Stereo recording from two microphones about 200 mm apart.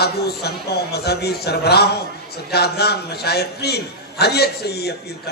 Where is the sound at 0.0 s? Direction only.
55° left (ahead or behind).